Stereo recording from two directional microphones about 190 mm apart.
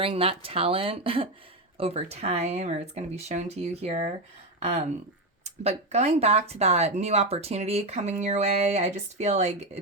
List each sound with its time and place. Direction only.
0.0 s speech: 30° right (ahead or behind)